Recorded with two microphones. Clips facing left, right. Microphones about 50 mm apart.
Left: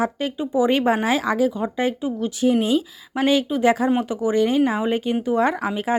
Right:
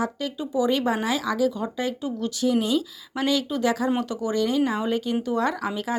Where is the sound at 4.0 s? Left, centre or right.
Left.